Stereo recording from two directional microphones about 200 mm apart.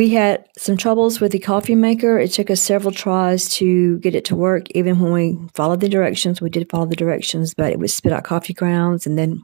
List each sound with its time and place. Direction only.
0.0 s speech: 35° right (ahead or behind)